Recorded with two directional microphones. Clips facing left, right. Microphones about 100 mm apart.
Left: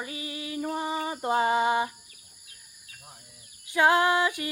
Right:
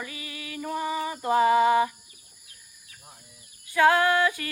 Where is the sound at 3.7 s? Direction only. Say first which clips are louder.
Right 1 dB; 20° left (ahead or behind).